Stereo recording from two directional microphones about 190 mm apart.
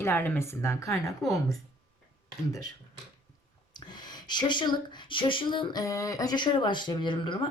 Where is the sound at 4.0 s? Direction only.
20° left (ahead or behind).